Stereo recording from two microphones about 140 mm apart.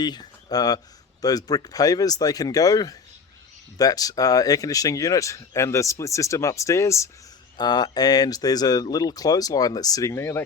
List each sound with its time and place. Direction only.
0.0 s speech: 30° left (ahead or behind)